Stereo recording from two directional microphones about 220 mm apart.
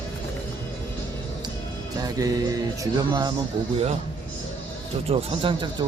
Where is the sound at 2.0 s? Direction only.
15° right (ahead or behind).